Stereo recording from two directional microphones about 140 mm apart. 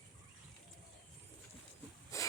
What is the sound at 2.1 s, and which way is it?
Rub, 20° left (ahead or behind).